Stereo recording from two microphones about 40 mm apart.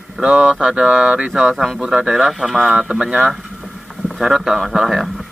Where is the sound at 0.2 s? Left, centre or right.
Centre.